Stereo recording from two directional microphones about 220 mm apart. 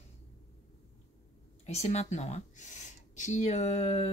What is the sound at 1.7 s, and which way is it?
Speech, 30° left (ahead or behind).